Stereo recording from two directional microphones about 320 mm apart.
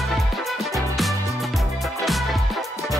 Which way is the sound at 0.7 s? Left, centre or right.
Centre.